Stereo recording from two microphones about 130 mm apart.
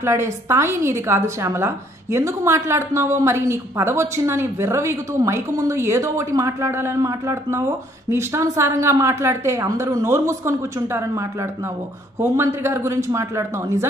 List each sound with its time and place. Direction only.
0.0 s a woman's voice: 20° right (ahead or behind)